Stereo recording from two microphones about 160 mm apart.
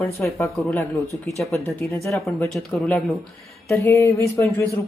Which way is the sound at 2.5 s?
Centre (ahead or behind).